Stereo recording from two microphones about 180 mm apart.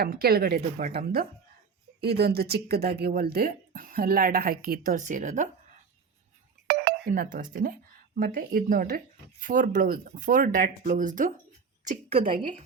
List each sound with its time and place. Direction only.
0.0 s speech: 55° right (ahead or behind)
6.7 s speech: 55° right (ahead or behind)
11.9 s a woman's voice: 35° right (ahead or behind)
12.2 s speech: 50° right (ahead or behind)